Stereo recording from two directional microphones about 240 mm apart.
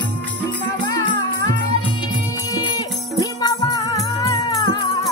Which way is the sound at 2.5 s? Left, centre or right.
Centre.